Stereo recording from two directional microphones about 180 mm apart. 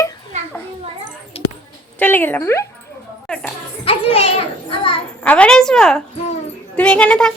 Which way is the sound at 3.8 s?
30° left (ahead or behind).